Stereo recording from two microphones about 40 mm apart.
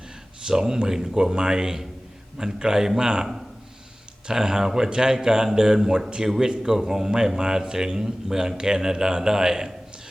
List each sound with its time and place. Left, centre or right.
0.4 s speech: centre
4.3 s speech: centre